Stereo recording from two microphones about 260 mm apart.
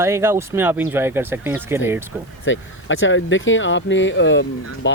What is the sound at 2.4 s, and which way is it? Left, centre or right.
Speech, left.